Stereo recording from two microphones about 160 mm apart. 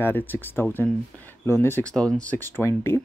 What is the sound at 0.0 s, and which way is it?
Speech, 10° left (ahead or behind).